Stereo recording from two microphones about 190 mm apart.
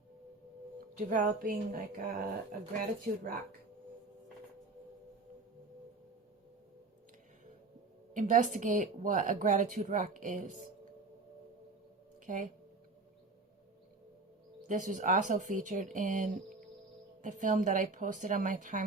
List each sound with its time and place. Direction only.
0.9 s speech: 45° right (ahead or behind)
8.1 s speech: 45° right (ahead or behind)
12.2 s speech: 45° right (ahead or behind)
14.7 s speech: 40° right (ahead or behind)